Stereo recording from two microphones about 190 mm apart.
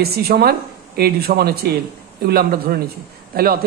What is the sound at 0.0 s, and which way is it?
A woman's voice, 55° right (ahead or behind).